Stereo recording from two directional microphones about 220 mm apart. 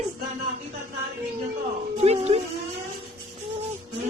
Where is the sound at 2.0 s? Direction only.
30° right (ahead or behind).